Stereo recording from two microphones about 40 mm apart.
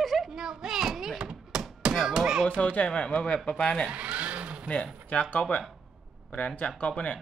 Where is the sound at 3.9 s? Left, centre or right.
Right.